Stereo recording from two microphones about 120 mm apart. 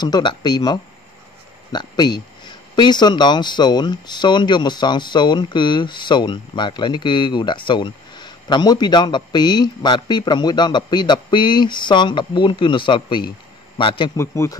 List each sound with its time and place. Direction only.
0.0 s a man's voice: 40° left (ahead or behind)
14.1 s speech: 25° left (ahead or behind)